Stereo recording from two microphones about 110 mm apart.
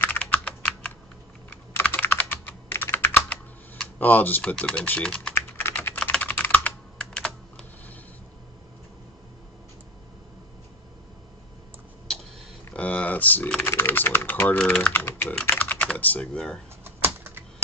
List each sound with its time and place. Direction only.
0.0 s computer keyboard: 15° left (ahead or behind)
3.8 s speech: 15° left (ahead or behind)
5.3 s typing: 20° left (ahead or behind)
5.9 s computer keyboard: 10° left (ahead or behind)
12.7 s speech: 10° left (ahead or behind)
16.8 s typing: 20° right (ahead or behind)